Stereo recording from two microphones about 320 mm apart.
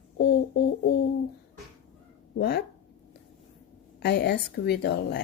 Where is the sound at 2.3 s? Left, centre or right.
Left.